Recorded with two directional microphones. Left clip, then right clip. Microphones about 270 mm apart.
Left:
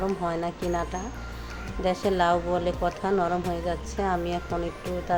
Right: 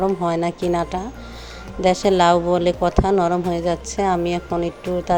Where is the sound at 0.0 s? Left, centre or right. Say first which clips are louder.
Right 8 dB; right.